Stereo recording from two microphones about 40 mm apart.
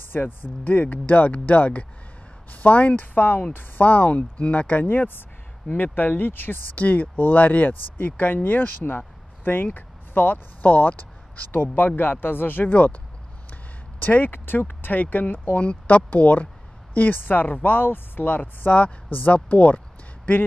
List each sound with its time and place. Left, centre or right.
0.1 s speech: left
2.5 s a sound: left
3.0 s speech: left
4.8 s speech: left
15.5 s speech: left
16.1 s speech: left
19.3 s speech: left